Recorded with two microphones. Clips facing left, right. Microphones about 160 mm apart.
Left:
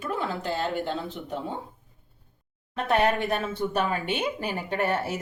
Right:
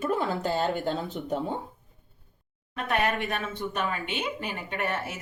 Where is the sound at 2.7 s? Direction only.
30° left (ahead or behind).